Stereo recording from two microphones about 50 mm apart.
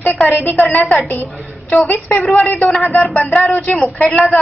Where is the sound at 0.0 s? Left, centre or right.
Left.